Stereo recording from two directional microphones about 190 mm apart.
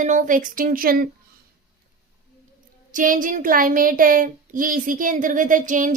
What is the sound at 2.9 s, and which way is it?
A woman's voice, 45° right (ahead or behind).